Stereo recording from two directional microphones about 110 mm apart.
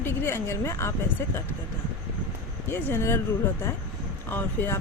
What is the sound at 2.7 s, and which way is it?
A woman's voice, 25° left (ahead or behind).